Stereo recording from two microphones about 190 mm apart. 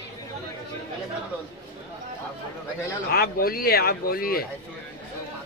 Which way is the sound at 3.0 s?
55° left (ahead or behind).